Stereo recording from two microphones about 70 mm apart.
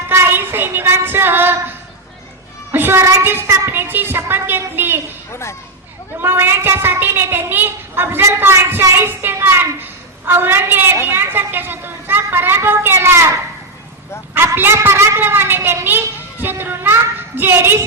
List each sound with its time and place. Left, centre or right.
0.1 s a sound: right
1.0 s a woman's voice: right
2.7 s child singing: right
3.7 s a woman's voice: right
6.1 s a woman's voice: right
14.3 s a sound: right
14.8 s a woman's voice: right